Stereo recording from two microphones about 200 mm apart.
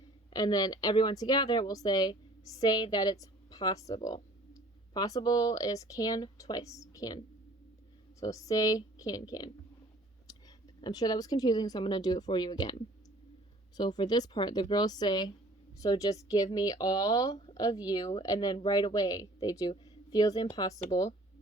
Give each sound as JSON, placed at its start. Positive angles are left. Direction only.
{"t": 0.3, "sound": "speech", "side_deg": 20}
{"t": 10.8, "sound": "speech", "side_deg": 20}